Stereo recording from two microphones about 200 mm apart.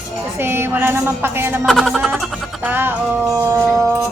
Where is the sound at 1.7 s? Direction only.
Centre (ahead or behind).